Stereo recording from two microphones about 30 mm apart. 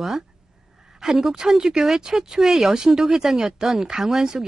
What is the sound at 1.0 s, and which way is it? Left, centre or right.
A woman's voice, centre.